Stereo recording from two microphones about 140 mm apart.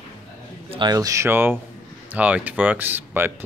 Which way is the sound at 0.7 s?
30° right (ahead or behind).